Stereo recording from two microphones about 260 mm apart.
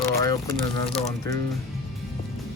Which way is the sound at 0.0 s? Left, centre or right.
Centre.